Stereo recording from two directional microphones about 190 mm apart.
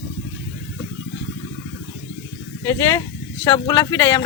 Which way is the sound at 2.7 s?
15° left (ahead or behind).